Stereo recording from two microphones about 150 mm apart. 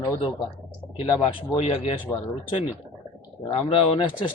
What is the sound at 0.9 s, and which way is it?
Speech, 30° left (ahead or behind).